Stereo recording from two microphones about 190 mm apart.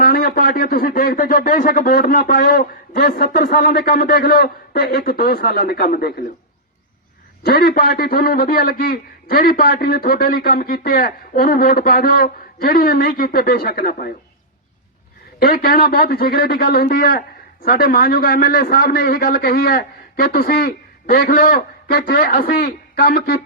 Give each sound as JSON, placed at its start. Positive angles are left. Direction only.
{"t": 0.0, "sound": "a man's voice", "side_deg": 50}
{"t": 7.4, "sound": "a man's voice", "side_deg": 55}
{"t": 15.4, "sound": "a man's voice", "side_deg": 50}